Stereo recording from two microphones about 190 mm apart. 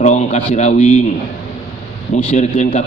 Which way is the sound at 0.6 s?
35° left (ahead or behind).